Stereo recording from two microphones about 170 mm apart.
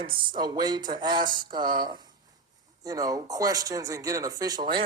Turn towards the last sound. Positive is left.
turn(degrees=-25)  # may be behind; listen again after turning